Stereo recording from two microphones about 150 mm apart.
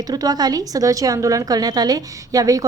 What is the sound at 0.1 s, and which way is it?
A woman's voice, 25° right (ahead or behind).